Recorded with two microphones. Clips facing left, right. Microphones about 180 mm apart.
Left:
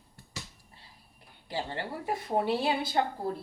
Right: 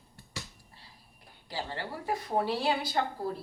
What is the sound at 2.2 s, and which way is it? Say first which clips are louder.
Speech: left 2 dB; 20° left (ahead or behind).